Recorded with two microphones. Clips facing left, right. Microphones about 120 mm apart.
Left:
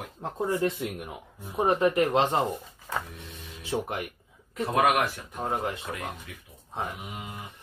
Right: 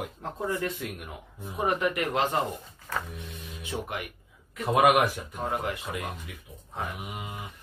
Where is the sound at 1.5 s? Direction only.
30° left (ahead or behind).